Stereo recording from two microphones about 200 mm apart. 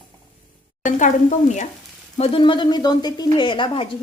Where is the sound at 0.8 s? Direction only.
40° left (ahead or behind).